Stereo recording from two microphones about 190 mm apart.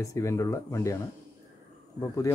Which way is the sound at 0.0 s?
15° left (ahead or behind).